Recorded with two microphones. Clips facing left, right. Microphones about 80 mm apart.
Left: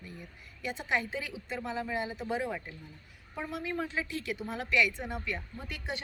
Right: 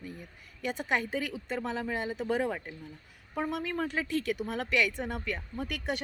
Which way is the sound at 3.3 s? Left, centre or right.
Right.